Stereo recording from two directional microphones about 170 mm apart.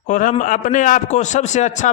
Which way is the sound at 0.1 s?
50° left (ahead or behind).